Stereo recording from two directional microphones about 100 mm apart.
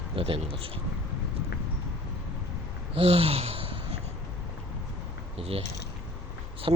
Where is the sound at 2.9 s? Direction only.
70° right (ahead or behind).